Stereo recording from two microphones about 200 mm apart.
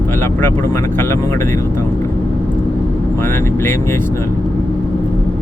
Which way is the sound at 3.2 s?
10° left (ahead or behind).